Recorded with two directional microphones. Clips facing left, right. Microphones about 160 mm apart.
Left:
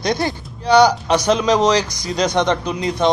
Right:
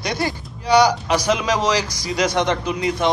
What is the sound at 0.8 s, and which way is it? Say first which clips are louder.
A man's voice: left 3 dB; 25° left (ahead or behind).